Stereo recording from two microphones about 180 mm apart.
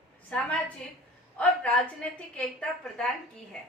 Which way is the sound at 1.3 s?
5° left (ahead or behind).